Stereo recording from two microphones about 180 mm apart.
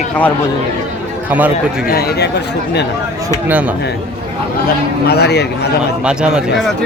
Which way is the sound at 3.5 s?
10° right (ahead or behind).